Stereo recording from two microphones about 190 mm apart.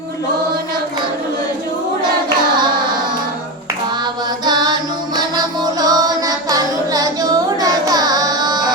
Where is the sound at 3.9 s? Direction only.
25° right (ahead or behind).